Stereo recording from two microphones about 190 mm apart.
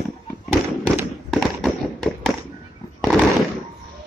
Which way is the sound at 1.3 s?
Centre (ahead or behind).